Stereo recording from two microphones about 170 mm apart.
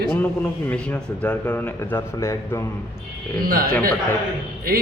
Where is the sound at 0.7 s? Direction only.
10° left (ahead or behind).